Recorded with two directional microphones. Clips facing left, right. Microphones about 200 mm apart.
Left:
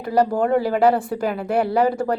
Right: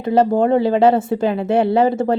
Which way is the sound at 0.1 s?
25° right (ahead or behind).